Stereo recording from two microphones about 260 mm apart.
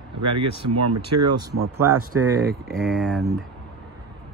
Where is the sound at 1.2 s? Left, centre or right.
Right.